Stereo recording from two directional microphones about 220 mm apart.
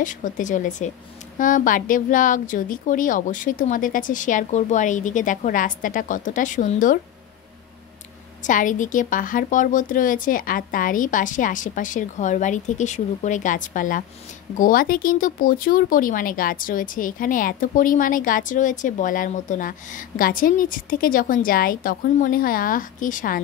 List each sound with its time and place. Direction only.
0.0 s speech: 35° left (ahead or behind)
8.5 s speech: 35° left (ahead or behind)